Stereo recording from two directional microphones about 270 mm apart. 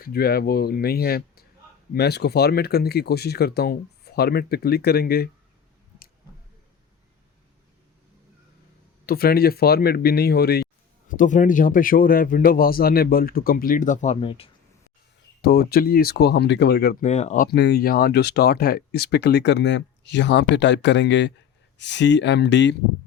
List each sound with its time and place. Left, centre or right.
0.0 s speech: left
9.0 s speech: left
15.4 s speech: left